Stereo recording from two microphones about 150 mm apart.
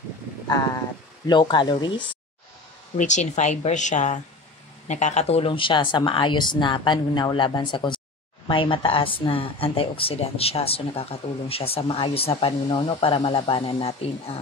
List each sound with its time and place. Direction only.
1.2 s speech: 30° left (ahead or behind)
3.0 s speech: 55° left (ahead or behind)